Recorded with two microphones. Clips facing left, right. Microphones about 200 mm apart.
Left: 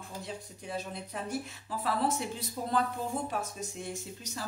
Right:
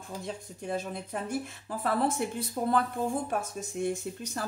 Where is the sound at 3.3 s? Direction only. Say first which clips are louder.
Right 3 dB; 50° right (ahead or behind).